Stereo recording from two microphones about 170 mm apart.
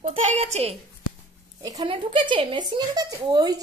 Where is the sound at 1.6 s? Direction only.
20° right (ahead or behind).